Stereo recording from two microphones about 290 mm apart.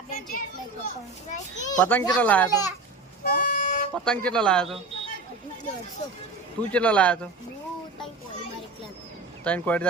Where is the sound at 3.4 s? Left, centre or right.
Left.